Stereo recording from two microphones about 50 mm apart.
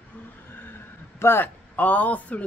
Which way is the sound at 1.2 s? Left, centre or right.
Left.